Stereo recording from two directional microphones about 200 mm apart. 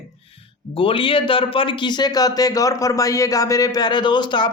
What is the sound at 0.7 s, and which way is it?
Speech, 25° left (ahead or behind).